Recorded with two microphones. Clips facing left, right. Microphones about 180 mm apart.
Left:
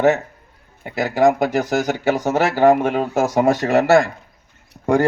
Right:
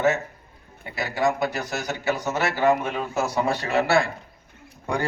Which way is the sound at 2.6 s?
50° left (ahead or behind).